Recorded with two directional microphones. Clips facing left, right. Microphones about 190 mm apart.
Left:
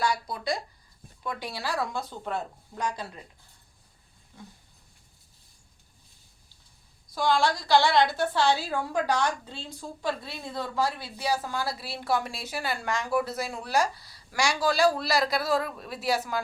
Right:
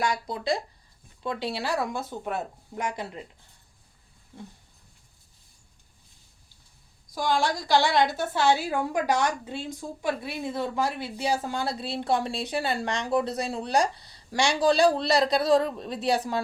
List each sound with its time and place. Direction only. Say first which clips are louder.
0.0 s a woman's voice: right 1 dB; 20° right (ahead or behind)
7.1 s a woman's voice: left 1 dB; 15° right (ahead or behind); by 16.4 s 30° right (ahead or behind)